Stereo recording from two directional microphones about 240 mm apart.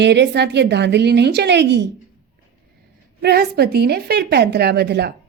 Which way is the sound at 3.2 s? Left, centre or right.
Right.